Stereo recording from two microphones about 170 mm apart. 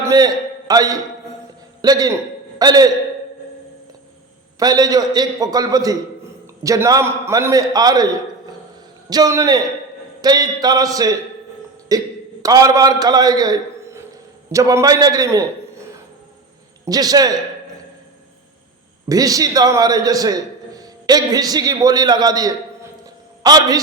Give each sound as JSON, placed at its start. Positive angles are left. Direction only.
{"t": 0.0, "sound": "a man's voice", "side_deg": -20}
{"t": 4.6, "sound": "a man's voice", "side_deg": -20}
{"t": 16.8, "sound": "a man's voice", "side_deg": -20}
{"t": 19.0, "sound": "a man's voice", "side_deg": -20}